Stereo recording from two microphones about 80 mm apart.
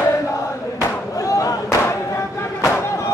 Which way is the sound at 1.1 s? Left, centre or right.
Left.